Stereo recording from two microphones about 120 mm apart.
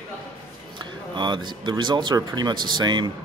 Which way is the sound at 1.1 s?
40° right (ahead or behind).